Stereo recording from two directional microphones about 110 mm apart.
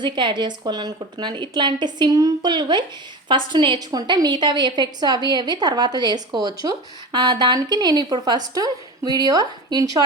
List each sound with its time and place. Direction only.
0.0 s a woman's voice: 45° right (ahead or behind)